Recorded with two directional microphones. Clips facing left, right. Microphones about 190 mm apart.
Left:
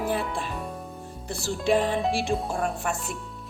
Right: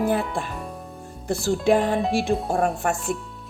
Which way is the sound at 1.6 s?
50° right (ahead or behind).